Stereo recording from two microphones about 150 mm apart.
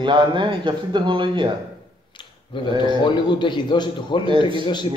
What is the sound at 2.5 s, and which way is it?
A man's voice, 30° left (ahead or behind).